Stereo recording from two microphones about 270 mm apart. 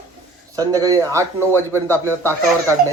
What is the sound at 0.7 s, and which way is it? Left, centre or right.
A man's voice, centre.